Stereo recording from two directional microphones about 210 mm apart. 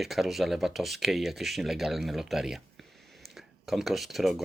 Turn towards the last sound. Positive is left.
turn(degrees=0)  # may be behind; listen again after turning